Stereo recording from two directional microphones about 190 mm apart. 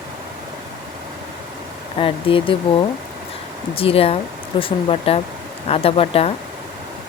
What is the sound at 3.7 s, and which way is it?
Speech, 30° left (ahead or behind).